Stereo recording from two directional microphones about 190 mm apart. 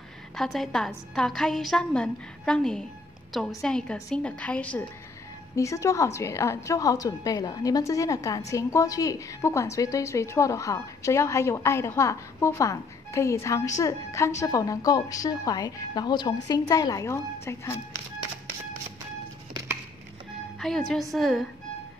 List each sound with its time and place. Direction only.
0.4 s a woman's voice: centre (ahead or behind)
20.5 s music: centre (ahead or behind)
21.1 s a woman's voice: centre (ahead or behind)